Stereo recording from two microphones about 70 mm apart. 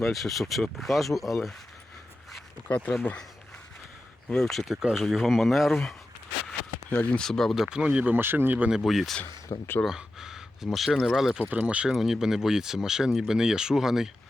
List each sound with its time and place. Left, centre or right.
0.0 s speech: centre
2.6 s speech: left
4.3 s speech: centre
4.7 s speech: centre
6.9 s speech: left
7.2 s speech: centre
7.6 s speech: centre
8.1 s speech: right
8.7 s speech: centre
9.5 s speech: left
9.8 s speech: centre
11.4 s speech: right
11.9 s speech: centre